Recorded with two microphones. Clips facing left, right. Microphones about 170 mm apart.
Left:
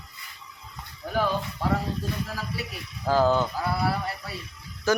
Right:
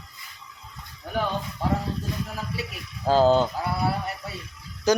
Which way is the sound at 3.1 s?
25° right (ahead or behind).